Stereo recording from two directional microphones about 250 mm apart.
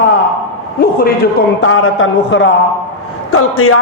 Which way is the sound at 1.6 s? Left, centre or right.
Left.